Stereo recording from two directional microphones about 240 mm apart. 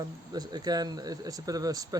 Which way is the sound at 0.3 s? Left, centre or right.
Centre.